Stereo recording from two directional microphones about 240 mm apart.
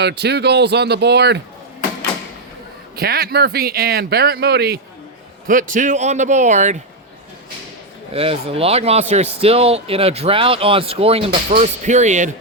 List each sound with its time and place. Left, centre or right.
0.0 s speech: right
2.9 s speech: right
8.1 s speech: right